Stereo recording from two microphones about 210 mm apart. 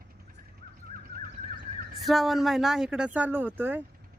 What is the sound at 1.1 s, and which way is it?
Bird, 45° right (ahead or behind).